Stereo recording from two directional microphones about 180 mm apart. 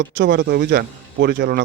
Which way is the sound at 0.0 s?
70° right (ahead or behind).